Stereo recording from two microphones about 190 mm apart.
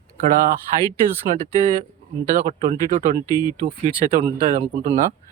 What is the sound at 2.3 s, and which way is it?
Speech, 40° right (ahead or behind).